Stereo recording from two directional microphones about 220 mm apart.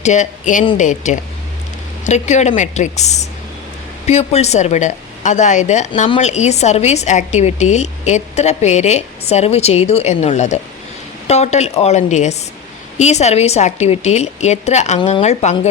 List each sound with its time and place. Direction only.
0.0 s a woman's voice: 35° left (ahead or behind)